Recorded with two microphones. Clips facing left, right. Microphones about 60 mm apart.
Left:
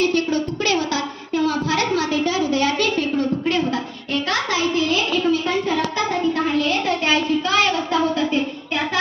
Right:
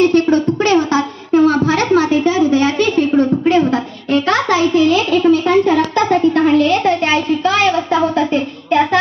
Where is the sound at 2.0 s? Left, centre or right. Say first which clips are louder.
Right 7 dB; right.